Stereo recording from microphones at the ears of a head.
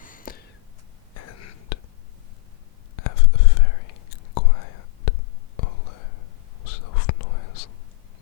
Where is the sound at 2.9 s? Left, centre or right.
Left.